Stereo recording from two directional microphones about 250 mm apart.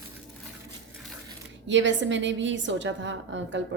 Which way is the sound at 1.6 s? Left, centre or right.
Right.